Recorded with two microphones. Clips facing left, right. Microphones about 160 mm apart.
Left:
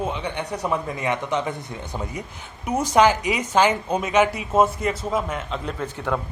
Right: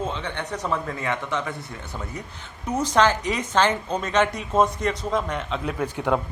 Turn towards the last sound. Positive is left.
turn(degrees=-15)  # may be behind; listen again after turning